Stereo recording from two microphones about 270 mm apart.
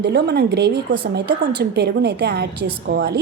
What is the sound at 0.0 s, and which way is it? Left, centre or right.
A woman's voice, right.